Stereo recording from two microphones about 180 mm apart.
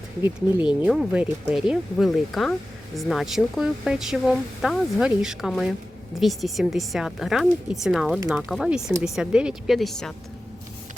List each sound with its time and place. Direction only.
0.2 s speech: 10° right (ahead or behind)